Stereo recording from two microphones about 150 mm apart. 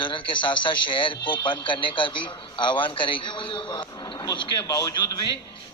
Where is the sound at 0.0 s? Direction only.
35° left (ahead or behind).